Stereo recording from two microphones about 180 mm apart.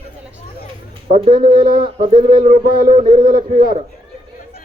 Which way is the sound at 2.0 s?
30° right (ahead or behind).